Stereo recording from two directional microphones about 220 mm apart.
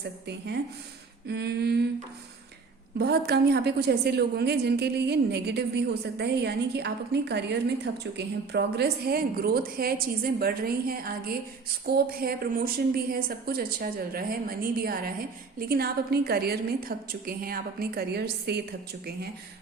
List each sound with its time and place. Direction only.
0.3 s a woman's voice: 45° right (ahead or behind)
3.0 s a woman's voice: 45° right (ahead or behind)